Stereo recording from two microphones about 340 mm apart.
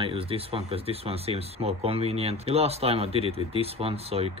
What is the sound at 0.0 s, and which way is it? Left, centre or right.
Speech, centre.